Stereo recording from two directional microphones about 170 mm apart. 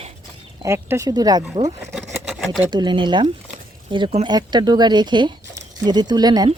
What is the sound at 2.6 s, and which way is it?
Speech, 25° right (ahead or behind).